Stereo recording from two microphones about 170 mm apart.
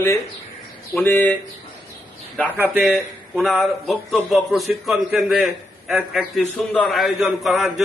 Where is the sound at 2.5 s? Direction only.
10° right (ahead or behind).